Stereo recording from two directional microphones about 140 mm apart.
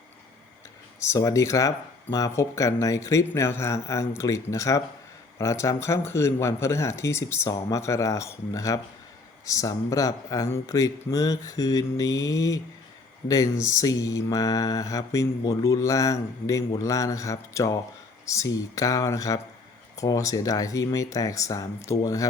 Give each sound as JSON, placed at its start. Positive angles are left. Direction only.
{"t": 1.0, "sound": "mantra", "side_deg": 20}